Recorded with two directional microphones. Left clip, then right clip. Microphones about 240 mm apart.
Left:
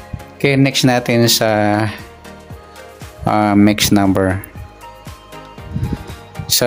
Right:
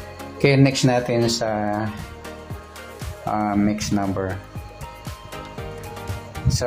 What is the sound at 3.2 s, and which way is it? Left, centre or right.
Speech, left.